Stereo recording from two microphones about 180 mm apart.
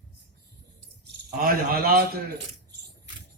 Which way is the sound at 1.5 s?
55° right (ahead or behind).